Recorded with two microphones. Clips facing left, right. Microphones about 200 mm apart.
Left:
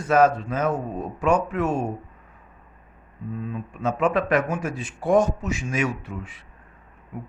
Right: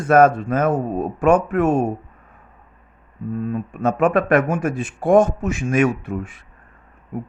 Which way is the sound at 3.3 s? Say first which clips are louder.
Right 7 dB; 50° right (ahead or behind).